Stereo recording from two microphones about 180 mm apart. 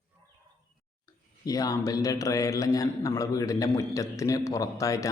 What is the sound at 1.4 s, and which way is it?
A man's voice, 20° left (ahead or behind).